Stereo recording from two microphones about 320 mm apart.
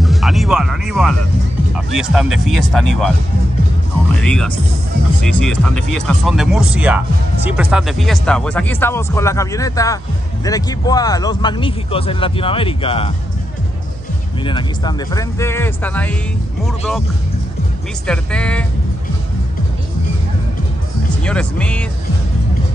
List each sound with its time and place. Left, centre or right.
0.0 s speech: centre
4.1 s speech: centre
14.4 s speech: centre
18.0 s speech: centre
21.2 s speech: centre